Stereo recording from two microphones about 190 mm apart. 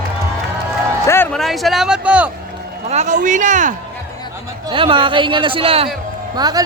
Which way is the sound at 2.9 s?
40° right (ahead or behind).